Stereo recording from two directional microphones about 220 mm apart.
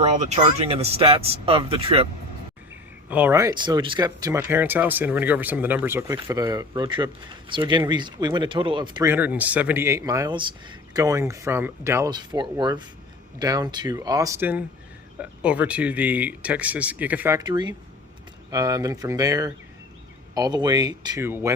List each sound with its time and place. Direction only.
0.0 s speech: 30° right (ahead or behind)
3.1 s speech: 10° right (ahead or behind)